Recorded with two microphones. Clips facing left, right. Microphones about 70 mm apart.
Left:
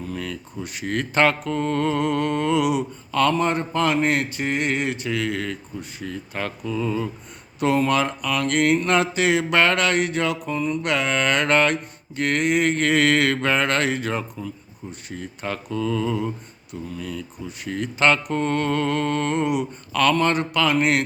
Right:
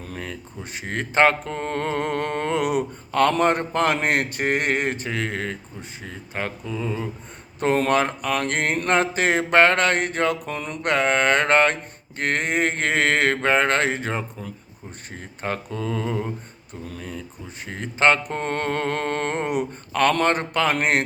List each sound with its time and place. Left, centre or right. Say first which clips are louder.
0.2 s music: left 3 dB; right
3.3 s speech: right 2 dB; right
7.9 s music: right 1 dB; right
10.8 s music: right 5 dB; right
20.1 s speech: even; right